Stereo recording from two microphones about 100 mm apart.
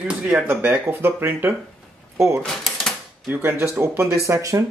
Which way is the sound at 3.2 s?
15° right (ahead or behind).